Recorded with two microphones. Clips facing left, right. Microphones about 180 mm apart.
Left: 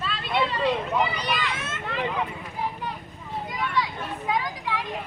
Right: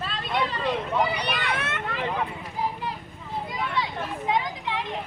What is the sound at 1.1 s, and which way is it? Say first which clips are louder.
Speech: right 1 dB; 65° right (ahead or behind).